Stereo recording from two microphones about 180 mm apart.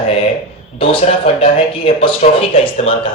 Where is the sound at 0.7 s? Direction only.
30° left (ahead or behind).